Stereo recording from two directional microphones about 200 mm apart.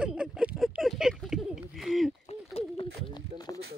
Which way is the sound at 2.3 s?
30° left (ahead or behind).